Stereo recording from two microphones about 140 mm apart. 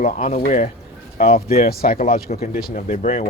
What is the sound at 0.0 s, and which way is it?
Speech, 60° left (ahead or behind).